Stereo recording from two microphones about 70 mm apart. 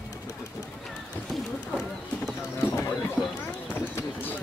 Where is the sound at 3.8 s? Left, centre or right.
Left.